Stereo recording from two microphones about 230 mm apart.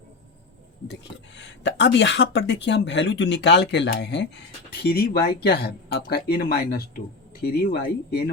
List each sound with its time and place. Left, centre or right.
1.4 s speech: left